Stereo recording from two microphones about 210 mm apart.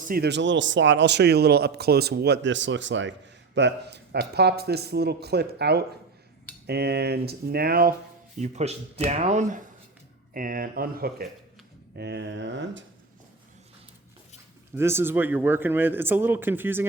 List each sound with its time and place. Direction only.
0.1 s speech: 50° right (ahead or behind)
8.4 s speech: 30° right (ahead or behind); by 12.8 s 60° right (ahead or behind)
14.8 s a man's voice: 10° right (ahead or behind)